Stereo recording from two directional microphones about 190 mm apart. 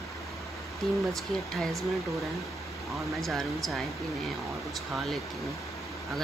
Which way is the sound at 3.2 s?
Centre (ahead or behind).